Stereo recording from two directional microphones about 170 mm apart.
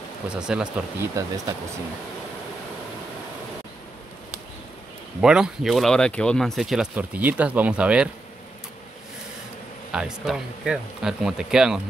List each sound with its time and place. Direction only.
0.3 s speech: 5° right (ahead or behind)
1.1 s speech: 20° right (ahead or behind)
5.2 s speech: 5° right (ahead or behind)
9.9 s speech: 5° right (ahead or behind)